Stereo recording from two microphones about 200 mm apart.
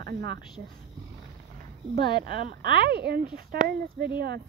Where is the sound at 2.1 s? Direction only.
50° right (ahead or behind).